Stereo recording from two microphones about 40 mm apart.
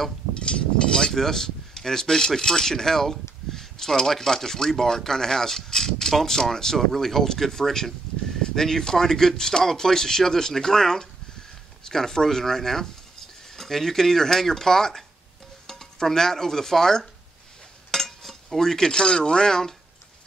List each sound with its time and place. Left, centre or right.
0.3 s speech: left
15.6 s music: centre
17.9 s speech: centre